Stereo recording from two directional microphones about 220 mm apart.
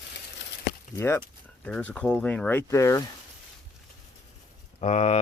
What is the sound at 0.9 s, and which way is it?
Speech, 10° left (ahead or behind).